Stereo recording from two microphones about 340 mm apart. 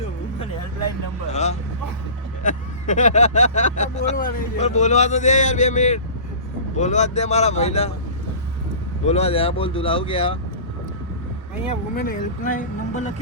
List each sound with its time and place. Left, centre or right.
1.3 s vehicle: centre
2.4 s speech: left
9.0 s speech: centre
11.7 s speech: left